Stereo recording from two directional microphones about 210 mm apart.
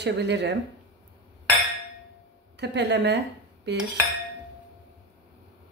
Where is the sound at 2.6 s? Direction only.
55° right (ahead or behind).